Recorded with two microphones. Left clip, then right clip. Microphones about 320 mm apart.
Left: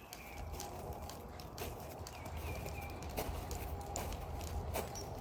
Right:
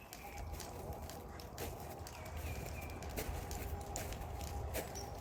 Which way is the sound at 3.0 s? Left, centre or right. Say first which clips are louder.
Left 2 dB; centre.